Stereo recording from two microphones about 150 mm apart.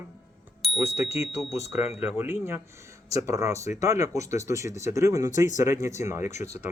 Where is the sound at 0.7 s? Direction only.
15° right (ahead or behind).